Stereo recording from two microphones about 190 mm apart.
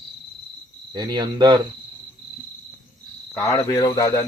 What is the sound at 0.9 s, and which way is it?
Speech, 20° right (ahead or behind).